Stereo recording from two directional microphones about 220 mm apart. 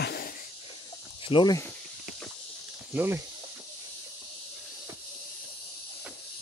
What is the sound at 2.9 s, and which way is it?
Speech, 10° right (ahead or behind).